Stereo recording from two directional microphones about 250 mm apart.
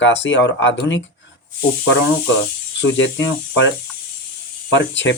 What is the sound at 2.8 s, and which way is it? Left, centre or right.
Speech, left.